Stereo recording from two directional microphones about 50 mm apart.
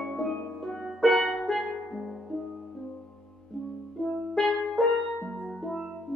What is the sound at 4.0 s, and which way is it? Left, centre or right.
Music, left.